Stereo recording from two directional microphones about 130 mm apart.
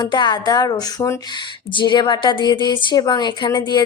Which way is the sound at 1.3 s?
35° left (ahead or behind).